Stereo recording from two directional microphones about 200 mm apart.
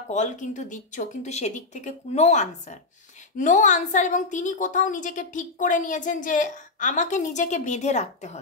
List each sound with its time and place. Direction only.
0.1 s a woman's voice: 35° left (ahead or behind)